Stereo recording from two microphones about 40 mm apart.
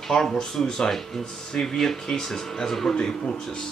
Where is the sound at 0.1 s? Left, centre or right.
Centre.